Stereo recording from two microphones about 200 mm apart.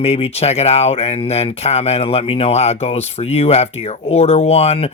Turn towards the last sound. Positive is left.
turn(degrees=30)  # may be behind; listen again after turning